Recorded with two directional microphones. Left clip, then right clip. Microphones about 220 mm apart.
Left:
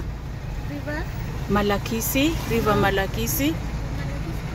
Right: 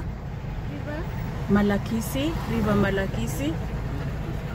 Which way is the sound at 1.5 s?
15° left (ahead or behind).